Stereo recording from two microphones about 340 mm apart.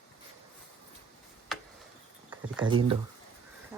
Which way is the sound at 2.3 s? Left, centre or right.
Centre.